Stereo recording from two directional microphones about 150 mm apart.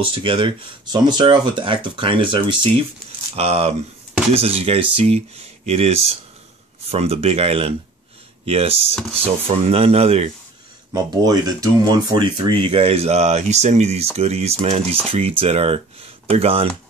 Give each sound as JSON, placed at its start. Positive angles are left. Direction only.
{"t": 0.0, "sound": "speech", "side_deg": -35}
{"t": 10.9, "sound": "speech", "side_deg": -25}